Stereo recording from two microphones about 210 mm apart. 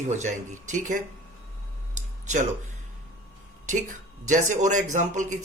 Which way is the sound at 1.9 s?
35° right (ahead or behind).